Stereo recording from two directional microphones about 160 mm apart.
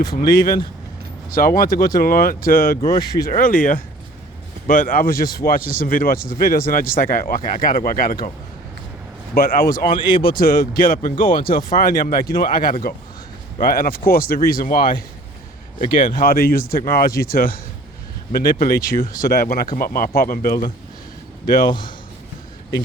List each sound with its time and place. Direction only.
0.1 s speech: 65° left (ahead or behind)
9.3 s speech: 65° left (ahead or behind)
10.0 s a man's voice: 30° left (ahead or behind)
10.2 s speech: 65° left (ahead or behind)
15.8 s speech: 65° left (ahead or behind)
21.7 s a man's voice: 30° left (ahead or behind)